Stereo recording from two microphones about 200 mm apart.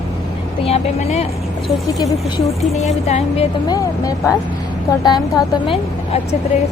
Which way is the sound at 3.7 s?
15° left (ahead or behind).